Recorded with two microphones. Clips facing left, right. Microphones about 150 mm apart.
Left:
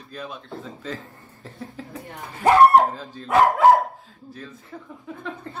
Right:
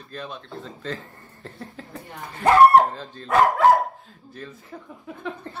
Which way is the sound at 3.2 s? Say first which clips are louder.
Left 2 dB; 5° left (ahead or behind).